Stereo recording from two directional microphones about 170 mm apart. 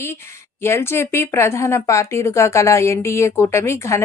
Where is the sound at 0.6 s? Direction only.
15° left (ahead or behind).